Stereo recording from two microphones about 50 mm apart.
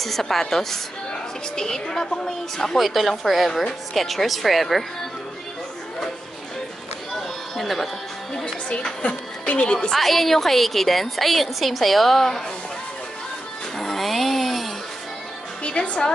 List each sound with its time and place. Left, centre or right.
0.0 s a woman's voice: centre
7.2 s a sound: centre
9.0 s music: left
9.9 s a woman's voice: centre
13.7 s a sound: centre
15.6 s a woman's voice: left